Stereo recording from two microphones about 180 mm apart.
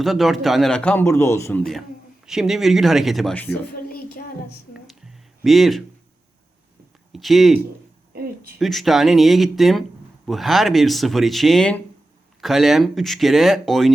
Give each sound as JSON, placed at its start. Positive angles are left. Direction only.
{"t": 0.0, "sound": "a man's voice", "side_deg": 0}
{"t": 2.2, "sound": "speech", "side_deg": 0}
{"t": 3.8, "sound": "child singing", "side_deg": 55}
{"t": 4.9, "sound": "a sound", "side_deg": 0}
{"t": 7.1, "sound": "speech", "side_deg": 0}